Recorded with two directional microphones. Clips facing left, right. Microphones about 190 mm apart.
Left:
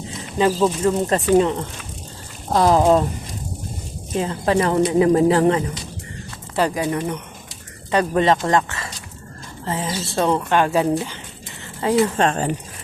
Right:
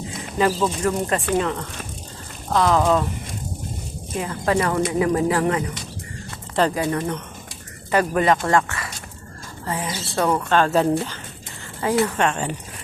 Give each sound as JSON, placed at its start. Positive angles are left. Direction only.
{"t": 0.4, "sound": "speech", "side_deg": 15}
{"t": 1.3, "sound": "a woman's voice", "side_deg": 30}
{"t": 4.2, "sound": "a woman's voice", "side_deg": 25}
{"t": 6.6, "sound": "a woman's voice", "side_deg": 15}